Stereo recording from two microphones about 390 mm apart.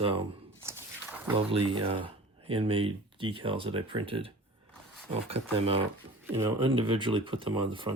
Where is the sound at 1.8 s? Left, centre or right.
Centre.